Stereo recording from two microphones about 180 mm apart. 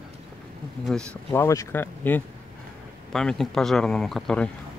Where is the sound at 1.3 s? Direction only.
15° left (ahead or behind).